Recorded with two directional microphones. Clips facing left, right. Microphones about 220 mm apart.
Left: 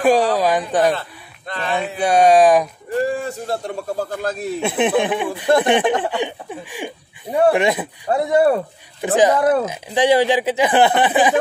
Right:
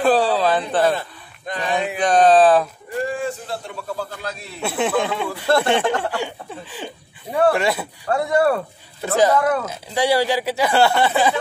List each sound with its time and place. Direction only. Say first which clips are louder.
0.0 s a sound: left 2 dB; 15° left (ahead or behind)
0.9 s a sound: right 1 dB; 15° right (ahead or behind)
2.0 s speech: left 1 dB; 10° left (ahead or behind)
3.3 s a man's voice: left 3 dB; 45° left (ahead or behind)
4.6 s speech: left 2 dB; 20° left (ahead or behind)
9.4 s speech: left 4 dB; 35° left (ahead or behind)
9.7 s speech: left 4 dB; 15° left (ahead or behind)